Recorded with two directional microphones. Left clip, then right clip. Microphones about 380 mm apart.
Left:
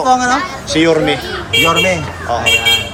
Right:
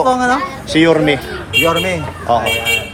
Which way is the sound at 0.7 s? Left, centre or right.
Right.